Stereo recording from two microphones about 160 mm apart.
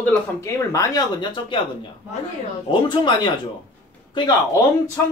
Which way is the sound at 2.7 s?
30° left (ahead or behind).